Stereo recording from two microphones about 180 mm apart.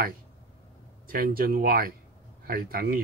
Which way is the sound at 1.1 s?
55° right (ahead or behind).